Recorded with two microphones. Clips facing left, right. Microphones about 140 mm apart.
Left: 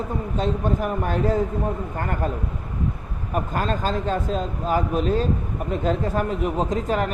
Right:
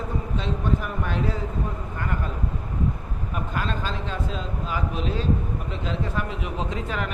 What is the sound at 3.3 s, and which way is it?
Speech, 45° left (ahead or behind).